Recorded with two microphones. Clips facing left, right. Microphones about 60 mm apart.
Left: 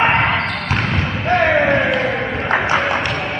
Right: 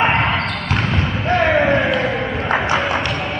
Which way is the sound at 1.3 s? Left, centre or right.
Centre.